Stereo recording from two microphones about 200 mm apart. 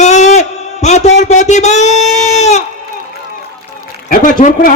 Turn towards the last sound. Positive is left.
turn(degrees=40)  # may be behind; listen again after turning